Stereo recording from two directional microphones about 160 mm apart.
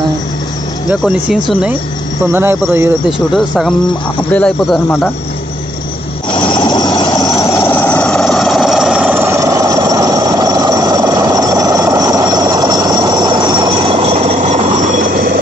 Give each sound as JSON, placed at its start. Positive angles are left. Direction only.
{"t": 1.0, "sound": "speech", "side_deg": -5}
{"t": 2.3, "sound": "speech", "side_deg": -15}
{"t": 3.1, "sound": "speech", "side_deg": 0}
{"t": 6.4, "sound": "vehicle", "side_deg": 30}
{"t": 12.1, "sound": "train", "side_deg": -25}